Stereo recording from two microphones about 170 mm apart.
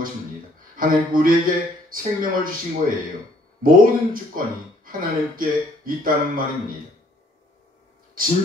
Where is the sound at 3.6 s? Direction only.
55° right (ahead or behind).